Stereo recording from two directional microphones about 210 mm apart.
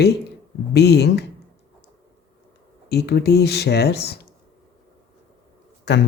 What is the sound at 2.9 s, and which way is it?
Speech, 50° left (ahead or behind).